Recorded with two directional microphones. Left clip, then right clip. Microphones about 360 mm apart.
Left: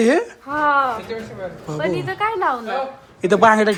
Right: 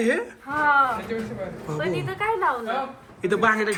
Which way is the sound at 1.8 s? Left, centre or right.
Centre.